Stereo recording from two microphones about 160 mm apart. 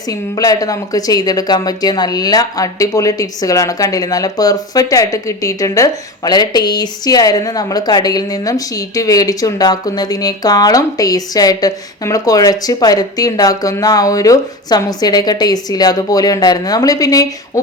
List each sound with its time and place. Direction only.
0.1 s speech: 20° left (ahead or behind)